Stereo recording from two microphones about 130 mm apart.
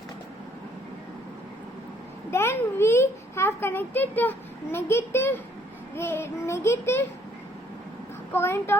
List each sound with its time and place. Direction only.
2.3 s a child's voice: 20° left (ahead or behind)
8.3 s a child's voice: 20° left (ahead or behind)